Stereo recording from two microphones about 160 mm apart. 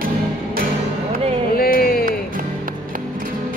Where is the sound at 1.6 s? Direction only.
65° left (ahead or behind).